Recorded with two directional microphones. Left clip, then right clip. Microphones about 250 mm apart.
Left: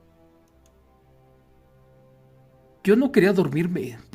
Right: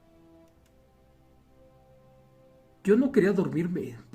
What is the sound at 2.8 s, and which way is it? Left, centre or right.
Speech, left.